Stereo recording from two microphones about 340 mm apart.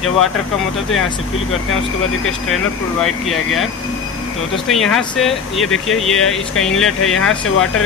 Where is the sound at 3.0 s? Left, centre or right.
Centre.